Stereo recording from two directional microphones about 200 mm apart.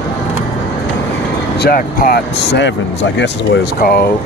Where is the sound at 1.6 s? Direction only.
50° left (ahead or behind).